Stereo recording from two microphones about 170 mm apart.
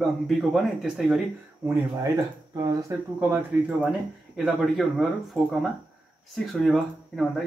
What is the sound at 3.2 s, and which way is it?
A man's voice, 10° right (ahead or behind).